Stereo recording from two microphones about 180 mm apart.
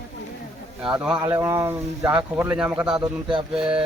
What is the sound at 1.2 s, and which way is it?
Speech, 15° right (ahead or behind).